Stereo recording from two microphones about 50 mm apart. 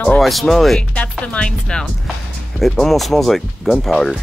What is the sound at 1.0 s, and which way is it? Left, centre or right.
Speech, left.